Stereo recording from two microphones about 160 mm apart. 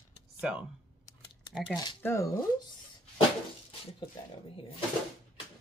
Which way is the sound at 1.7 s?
25° left (ahead or behind).